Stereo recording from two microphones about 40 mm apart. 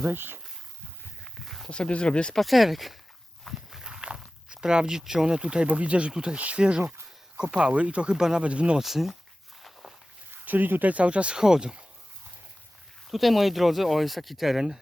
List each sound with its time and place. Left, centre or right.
0.0 s speech: right
1.4 s a sound: centre
1.7 s speech: left
2.3 s speech: centre
3.5 s walk: centre
4.5 s speech: right
6.1 s speech: centre
6.4 s speech: right
8.8 s speech: centre
10.3 s speech: right
10.9 s speech: right
11.3 s speech: centre
13.1 s speech: centre